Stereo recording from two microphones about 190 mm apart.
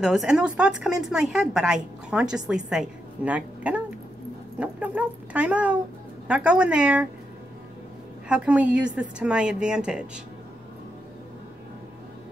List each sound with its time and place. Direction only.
0.0 s speech: 5° right (ahead or behind)
8.3 s speech: 5° right (ahead or behind)